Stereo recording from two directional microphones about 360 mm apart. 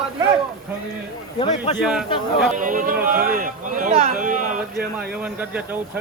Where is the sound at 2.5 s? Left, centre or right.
Right.